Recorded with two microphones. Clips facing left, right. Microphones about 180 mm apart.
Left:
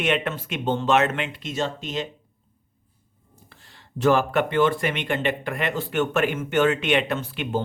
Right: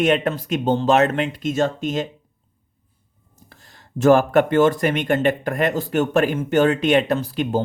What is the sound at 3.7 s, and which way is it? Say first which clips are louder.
Speech: right 6 dB; 45° right (ahead or behind).